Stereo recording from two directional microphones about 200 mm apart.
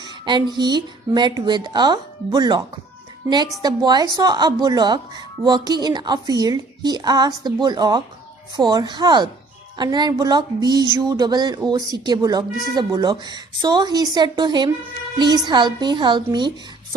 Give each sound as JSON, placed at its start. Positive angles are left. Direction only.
{"t": 0.0, "sound": "a woman's voice", "side_deg": -20}